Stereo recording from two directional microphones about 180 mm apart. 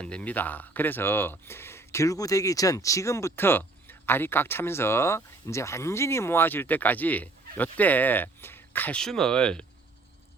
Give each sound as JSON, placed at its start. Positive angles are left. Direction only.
{"t": 0.0, "sound": "speech", "side_deg": 5}